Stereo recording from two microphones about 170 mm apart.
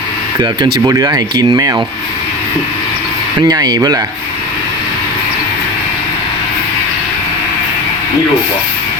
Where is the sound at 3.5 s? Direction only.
25° right (ahead or behind).